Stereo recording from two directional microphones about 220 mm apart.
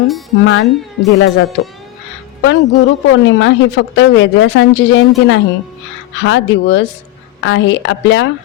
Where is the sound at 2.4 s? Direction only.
55° left (ahead or behind).